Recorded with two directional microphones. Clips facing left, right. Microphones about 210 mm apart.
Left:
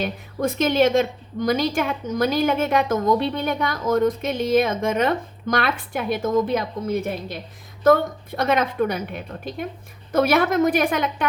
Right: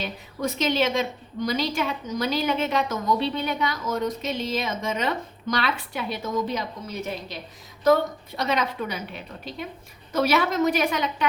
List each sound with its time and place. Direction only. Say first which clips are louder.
0.0 s a woman's voice: left 5 dB; 50° left (ahead or behind)